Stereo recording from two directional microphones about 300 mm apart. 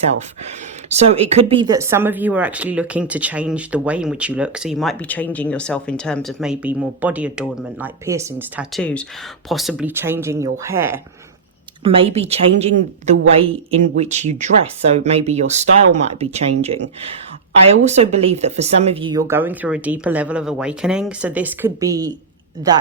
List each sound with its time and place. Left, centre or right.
0.9 s speech: right
11.8 s speech: centre